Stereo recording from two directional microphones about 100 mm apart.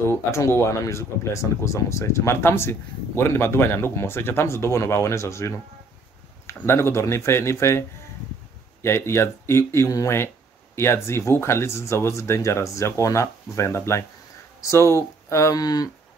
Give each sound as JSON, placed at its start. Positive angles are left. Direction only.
{"t": 0.1, "sound": "speech", "side_deg": 30}
{"t": 8.8, "sound": "speech", "side_deg": 25}